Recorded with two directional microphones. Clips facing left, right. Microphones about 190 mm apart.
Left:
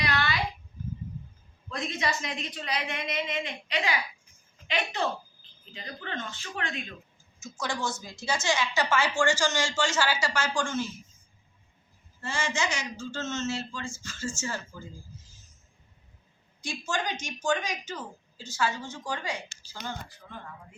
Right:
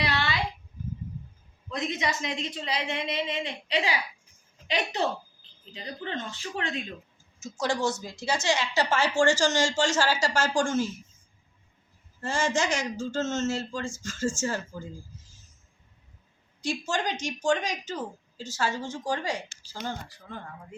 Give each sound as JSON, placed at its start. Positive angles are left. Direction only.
{"t": 0.0, "sound": "a sound", "side_deg": -25}
{"t": 1.7, "sound": "a woman's voice", "side_deg": -20}
{"t": 12.2, "sound": "speech", "side_deg": -45}
{"t": 16.6, "sound": "a woman's voice", "side_deg": -40}